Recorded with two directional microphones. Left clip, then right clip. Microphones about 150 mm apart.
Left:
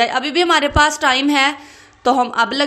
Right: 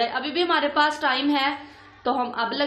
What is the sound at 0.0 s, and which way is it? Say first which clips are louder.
A woman's voice: left 8 dB; 45° left (ahead or behind).